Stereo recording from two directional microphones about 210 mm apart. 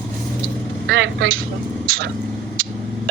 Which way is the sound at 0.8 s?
55° right (ahead or behind).